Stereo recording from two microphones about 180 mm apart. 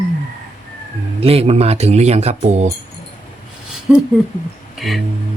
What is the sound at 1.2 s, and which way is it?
Speech, 35° right (ahead or behind).